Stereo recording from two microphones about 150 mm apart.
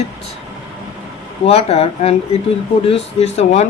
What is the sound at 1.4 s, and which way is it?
Speech, 45° left (ahead or behind).